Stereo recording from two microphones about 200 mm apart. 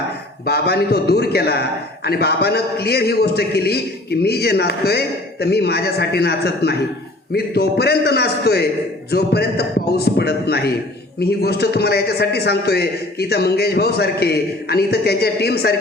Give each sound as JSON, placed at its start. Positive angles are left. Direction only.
{"t": 0.4, "sound": "a man's voice", "side_deg": 55}